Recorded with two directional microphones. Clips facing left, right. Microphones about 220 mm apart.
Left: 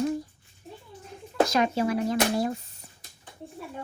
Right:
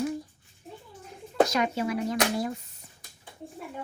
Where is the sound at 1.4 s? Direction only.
30° left (ahead or behind).